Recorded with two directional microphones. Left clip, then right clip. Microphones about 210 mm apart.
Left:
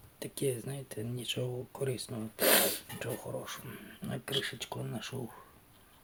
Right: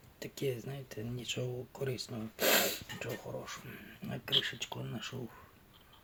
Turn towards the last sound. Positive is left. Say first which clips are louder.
# left 2 dB
turn(degrees=0)  # may be behind; listen again after turning